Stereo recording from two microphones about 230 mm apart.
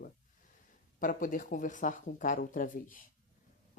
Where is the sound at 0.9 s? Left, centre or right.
Left.